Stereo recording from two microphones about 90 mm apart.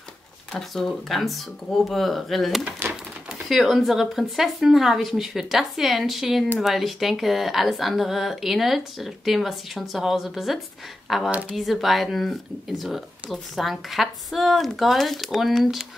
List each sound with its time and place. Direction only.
0.5 s speech: 5° left (ahead or behind)
2.8 s a sound: 25° right (ahead or behind)
3.4 s speech: centre (ahead or behind)